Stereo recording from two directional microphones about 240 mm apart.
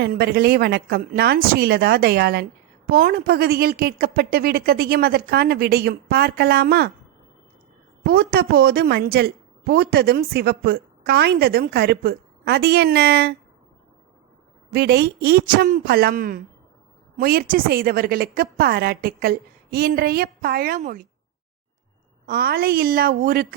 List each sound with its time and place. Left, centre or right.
0.0 s a woman's voice: right
8.0 s a woman's voice: right
14.7 s a woman's voice: right
22.3 s a woman's voice: right